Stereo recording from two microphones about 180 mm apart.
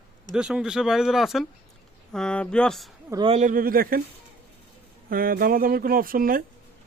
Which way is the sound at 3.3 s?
45° right (ahead or behind).